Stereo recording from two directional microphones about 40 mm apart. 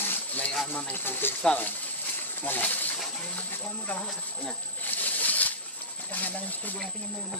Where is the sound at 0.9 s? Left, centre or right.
Left.